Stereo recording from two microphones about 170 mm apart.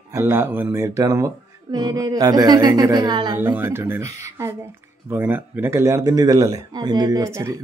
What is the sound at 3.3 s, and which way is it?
Speech, 15° right (ahead or behind).